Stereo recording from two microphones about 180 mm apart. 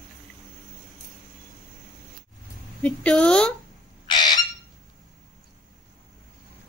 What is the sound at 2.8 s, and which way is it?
Speech, 5° left (ahead or behind).